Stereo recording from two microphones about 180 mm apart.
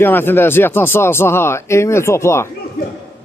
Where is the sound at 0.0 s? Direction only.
10° left (ahead or behind).